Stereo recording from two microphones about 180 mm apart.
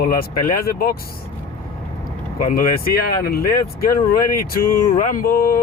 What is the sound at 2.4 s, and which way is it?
Speech, 50° left (ahead or behind).